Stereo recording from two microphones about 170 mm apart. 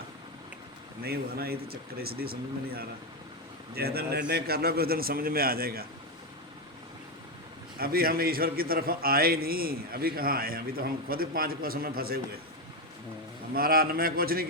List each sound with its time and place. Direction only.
1.0 s a man's voice: 65° right (ahead or behind)
7.8 s a man's voice: 60° right (ahead or behind)
13.5 s a man's voice: 60° right (ahead or behind)